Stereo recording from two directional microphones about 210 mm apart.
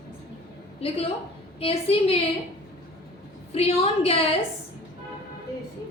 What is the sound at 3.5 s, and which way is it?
Speech, 30° left (ahead or behind).